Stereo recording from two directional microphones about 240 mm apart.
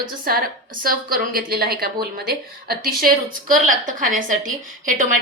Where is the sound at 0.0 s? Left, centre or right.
Right.